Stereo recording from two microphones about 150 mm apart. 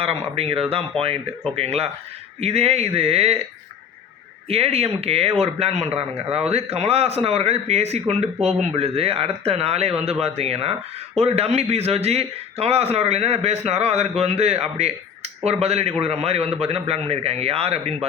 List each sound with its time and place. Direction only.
0.0 s a man's voice: 40° right (ahead or behind)
4.4 s a man's voice: 40° right (ahead or behind)